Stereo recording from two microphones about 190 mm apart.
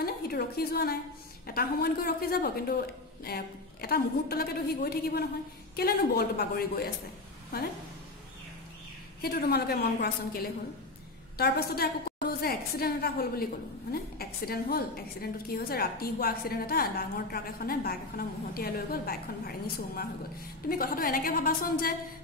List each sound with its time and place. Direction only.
0.0 s a woman's voice: 55° left (ahead or behind)
9.2 s a woman's voice: 55° left (ahead or behind)
20.6 s a woman's voice: 50° left (ahead or behind)